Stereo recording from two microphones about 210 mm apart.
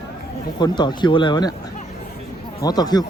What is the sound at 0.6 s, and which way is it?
Speech, 20° left (ahead or behind).